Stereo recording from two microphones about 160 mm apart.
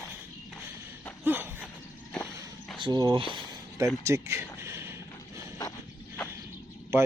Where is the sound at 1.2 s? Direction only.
10° right (ahead or behind).